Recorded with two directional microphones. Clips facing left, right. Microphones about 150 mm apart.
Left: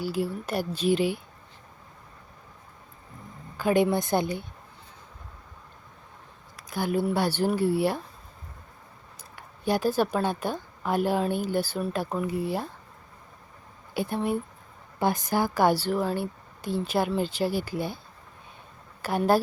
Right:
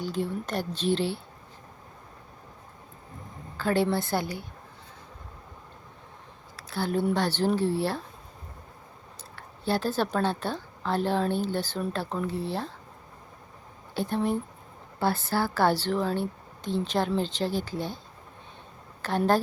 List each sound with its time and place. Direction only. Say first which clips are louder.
0.0 s speech: left 1 dB; 10° left (ahead or behind)
3.6 s speech: left 3 dB; 15° left (ahead or behind)
6.6 s a sound: left 1 dB; 15° left (ahead or behind)
7.0 s speech: right 1 dB; 10° left (ahead or behind)
9.3 s speech: left 2 dB; 15° left (ahead or behind)
13.9 s speech: even; 10° left (ahead or behind)
19.0 s speech: left 1 dB; 10° left (ahead or behind)